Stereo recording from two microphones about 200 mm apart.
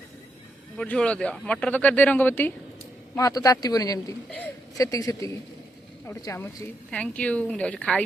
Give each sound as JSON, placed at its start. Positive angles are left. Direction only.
{"t": 0.8, "sound": "a woman's voice", "side_deg": 5}